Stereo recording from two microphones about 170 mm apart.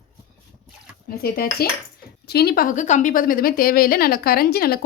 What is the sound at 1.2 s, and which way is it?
A woman's voice, 65° left (ahead or behind).